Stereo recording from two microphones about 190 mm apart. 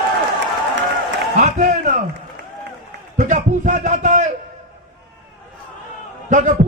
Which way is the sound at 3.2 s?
40° right (ahead or behind).